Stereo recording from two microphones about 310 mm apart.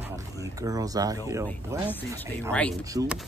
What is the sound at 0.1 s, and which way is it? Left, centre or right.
Speech, centre.